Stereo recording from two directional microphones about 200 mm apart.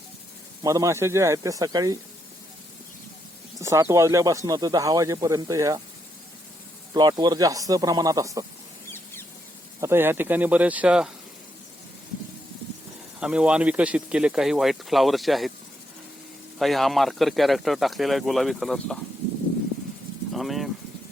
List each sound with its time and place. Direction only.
0.6 s speech: 15° right (ahead or behind)
3.6 s speech: 15° right (ahead or behind)
6.9 s speech: 20° right (ahead or behind)
9.8 s speech: 10° right (ahead or behind)
13.1 s speech: 5° right (ahead or behind)
16.6 s speech: centre (ahead or behind)
20.3 s speech: centre (ahead or behind)